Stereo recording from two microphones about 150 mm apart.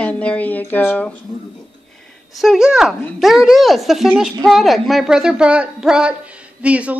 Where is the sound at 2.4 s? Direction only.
5° right (ahead or behind).